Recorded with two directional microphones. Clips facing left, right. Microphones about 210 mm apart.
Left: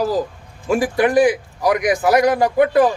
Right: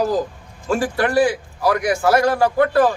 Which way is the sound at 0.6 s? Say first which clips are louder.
Left 3 dB; 15° left (ahead or behind).